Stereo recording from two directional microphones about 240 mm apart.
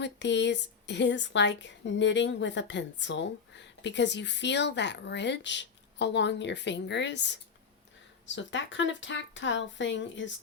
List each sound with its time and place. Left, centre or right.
0.0 s a woman's voice: left
8.4 s a woman's voice: left